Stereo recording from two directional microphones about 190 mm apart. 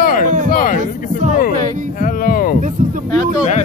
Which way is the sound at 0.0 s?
45° left (ahead or behind).